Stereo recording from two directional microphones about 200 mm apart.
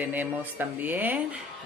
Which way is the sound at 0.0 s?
10° right (ahead or behind).